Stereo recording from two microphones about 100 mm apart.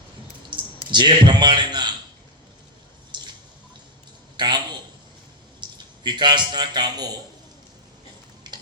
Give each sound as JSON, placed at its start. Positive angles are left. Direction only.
{"t": 0.9, "sound": "a man's voice", "side_deg": -50}
{"t": 3.1, "sound": "drip", "side_deg": -50}
{"t": 4.4, "sound": "a sound", "side_deg": -45}
{"t": 5.5, "sound": "a man's voice", "side_deg": -45}
{"t": 8.4, "sound": "stir", "side_deg": -45}